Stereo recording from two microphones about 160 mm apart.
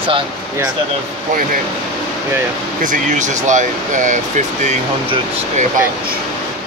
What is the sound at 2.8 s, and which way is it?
Speech, 55° right (ahead or behind).